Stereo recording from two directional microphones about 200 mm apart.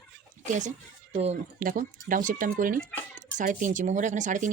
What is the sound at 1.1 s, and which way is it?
Speech, 35° right (ahead or behind).